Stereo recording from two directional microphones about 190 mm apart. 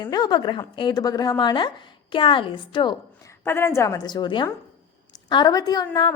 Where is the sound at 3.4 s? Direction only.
15° left (ahead or behind).